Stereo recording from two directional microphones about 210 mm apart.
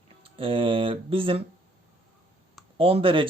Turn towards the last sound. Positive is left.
turn(degrees=-25)  # may be behind; listen again after turning